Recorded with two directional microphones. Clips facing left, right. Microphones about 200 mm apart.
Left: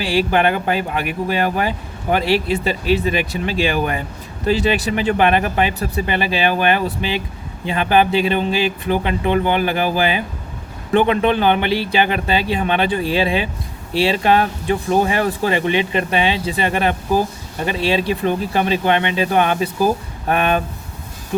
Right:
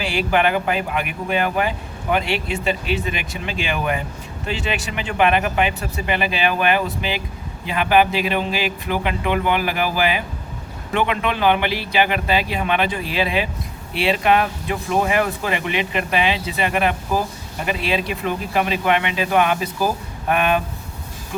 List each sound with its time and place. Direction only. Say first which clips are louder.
0.0 s speech: left 3 dB; 35° left (ahead or behind)